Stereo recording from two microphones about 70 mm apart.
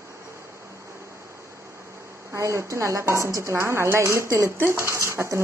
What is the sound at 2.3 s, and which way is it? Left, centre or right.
Speech, right.